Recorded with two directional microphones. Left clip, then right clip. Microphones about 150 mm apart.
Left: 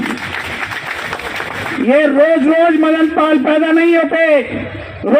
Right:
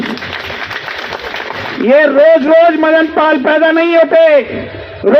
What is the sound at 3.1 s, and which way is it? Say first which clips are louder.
A man's voice: right 2 dB; 35° right (ahead or behind).